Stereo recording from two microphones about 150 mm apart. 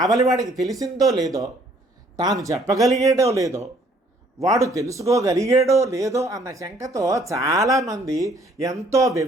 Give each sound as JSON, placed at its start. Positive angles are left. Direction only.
{"t": 0.0, "sound": "speech", "side_deg": -25}
{"t": 0.4, "sound": "speech", "side_deg": 0}
{"t": 0.7, "sound": "speech", "side_deg": -25}